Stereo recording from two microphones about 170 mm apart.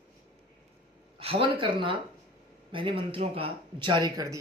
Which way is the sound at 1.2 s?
35° right (ahead or behind).